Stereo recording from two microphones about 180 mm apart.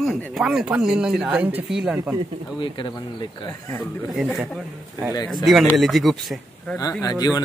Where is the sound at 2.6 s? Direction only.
25° left (ahead or behind).